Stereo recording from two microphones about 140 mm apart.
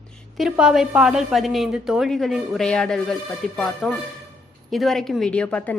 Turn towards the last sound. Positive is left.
turn(degrees=10)  # may be behind; listen again after turning